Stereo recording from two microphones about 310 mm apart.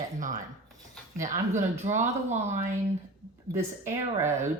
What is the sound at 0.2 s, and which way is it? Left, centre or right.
Speech, right.